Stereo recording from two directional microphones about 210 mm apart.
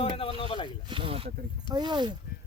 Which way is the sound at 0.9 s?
25° right (ahead or behind).